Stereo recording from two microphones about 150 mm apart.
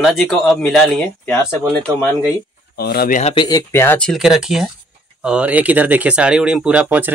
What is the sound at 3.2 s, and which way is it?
Speech, 40° left (ahead or behind).